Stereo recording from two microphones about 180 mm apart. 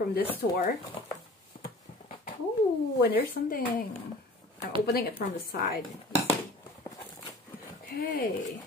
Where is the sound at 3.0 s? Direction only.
55° left (ahead or behind).